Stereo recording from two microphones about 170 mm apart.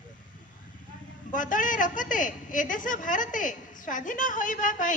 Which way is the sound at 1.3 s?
50° left (ahead or behind).